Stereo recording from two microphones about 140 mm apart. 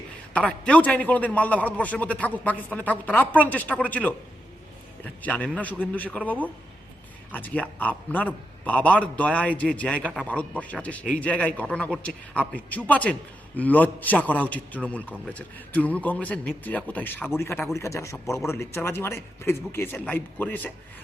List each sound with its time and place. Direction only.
0.3 s a man's voice: 10° left (ahead or behind)